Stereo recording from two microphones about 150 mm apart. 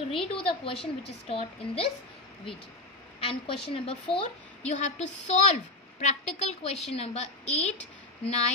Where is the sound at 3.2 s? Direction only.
40° left (ahead or behind).